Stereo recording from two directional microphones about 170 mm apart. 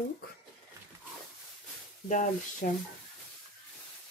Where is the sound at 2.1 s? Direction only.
50° left (ahead or behind).